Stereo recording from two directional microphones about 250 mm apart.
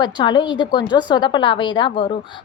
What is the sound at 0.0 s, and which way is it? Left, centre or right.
A woman's voice, centre.